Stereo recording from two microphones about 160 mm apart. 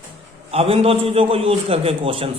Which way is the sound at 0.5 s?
35° right (ahead or behind).